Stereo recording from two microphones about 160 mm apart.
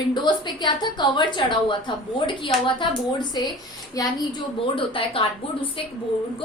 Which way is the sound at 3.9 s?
20° left (ahead or behind).